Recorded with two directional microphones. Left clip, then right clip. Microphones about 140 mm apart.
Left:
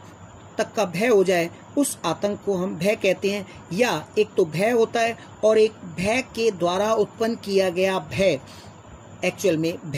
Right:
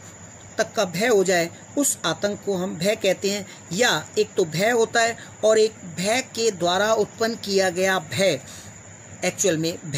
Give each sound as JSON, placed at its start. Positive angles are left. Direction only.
{"t": 0.6, "sound": "speech", "side_deg": 10}